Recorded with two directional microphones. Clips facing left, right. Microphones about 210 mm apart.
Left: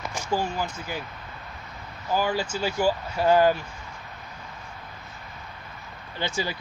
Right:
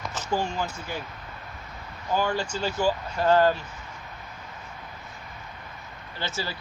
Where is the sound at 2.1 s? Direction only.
5° left (ahead or behind).